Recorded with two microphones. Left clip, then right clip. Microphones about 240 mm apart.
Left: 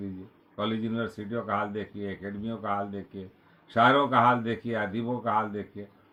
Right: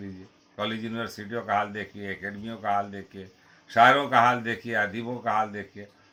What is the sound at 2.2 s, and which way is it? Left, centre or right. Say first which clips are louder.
Speech: right 5 dB; centre.